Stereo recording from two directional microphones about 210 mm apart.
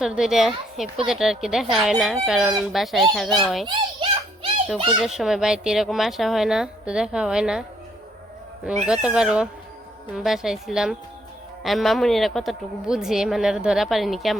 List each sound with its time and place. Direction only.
0.0 s a woman's voice: centre (ahead or behind)
3.7 s a sound: 25° right (ahead or behind)
4.9 s a woman's voice: centre (ahead or behind)
8.9 s a woman's voice: 5° right (ahead or behind)